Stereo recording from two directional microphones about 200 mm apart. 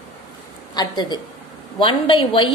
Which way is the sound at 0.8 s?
20° left (ahead or behind).